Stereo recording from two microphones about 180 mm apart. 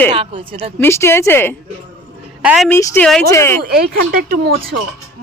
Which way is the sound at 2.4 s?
5° right (ahead or behind).